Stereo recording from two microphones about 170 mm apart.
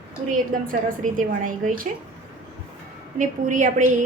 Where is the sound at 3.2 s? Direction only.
50° right (ahead or behind).